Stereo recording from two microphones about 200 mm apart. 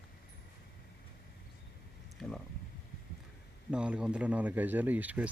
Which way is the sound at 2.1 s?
5° left (ahead or behind).